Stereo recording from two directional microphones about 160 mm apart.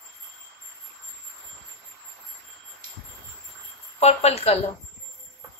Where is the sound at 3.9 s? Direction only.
40° left (ahead or behind).